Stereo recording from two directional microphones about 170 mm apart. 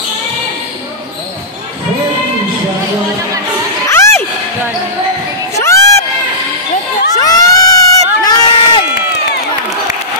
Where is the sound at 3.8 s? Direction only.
15° left (ahead or behind).